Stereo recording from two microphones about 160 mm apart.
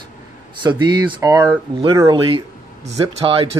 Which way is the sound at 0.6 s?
30° right (ahead or behind).